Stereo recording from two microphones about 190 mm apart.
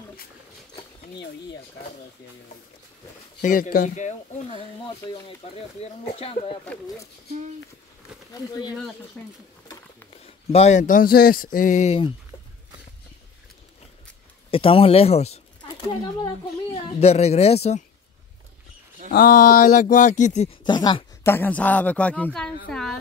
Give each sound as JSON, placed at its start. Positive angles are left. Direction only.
{"t": 3.4, "sound": "speech", "side_deg": 45}
{"t": 6.6, "sound": "a woman's voice", "side_deg": 5}
{"t": 8.3, "sound": "speech", "side_deg": 20}
{"t": 10.2, "sound": "speech", "side_deg": 35}
{"t": 14.5, "sound": "speech", "side_deg": 30}
{"t": 19.1, "sound": "speech", "side_deg": 50}
{"t": 20.6, "sound": "a woman's voice", "side_deg": 25}